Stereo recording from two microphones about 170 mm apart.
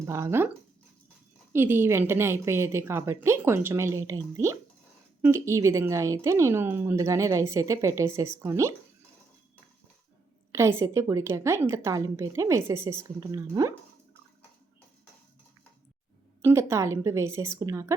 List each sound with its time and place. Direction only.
0.0 s a woman's voice: 15° right (ahead or behind)
1.5 s a woman's voice: 15° right (ahead or behind)
10.5 s a woman's voice: 15° right (ahead or behind)
16.4 s a woman's voice: 15° right (ahead or behind)